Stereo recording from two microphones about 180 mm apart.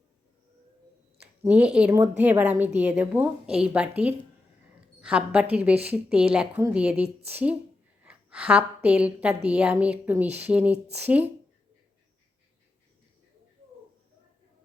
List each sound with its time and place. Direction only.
1.2 s a woman's voice: 5° right (ahead or behind)
6.9 s a woman's voice: 35° right (ahead or behind)
7.3 s a woman's voice: 10° right (ahead or behind)